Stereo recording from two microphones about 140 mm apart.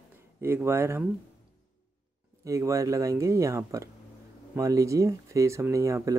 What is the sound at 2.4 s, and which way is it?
Speech, 20° right (ahead or behind).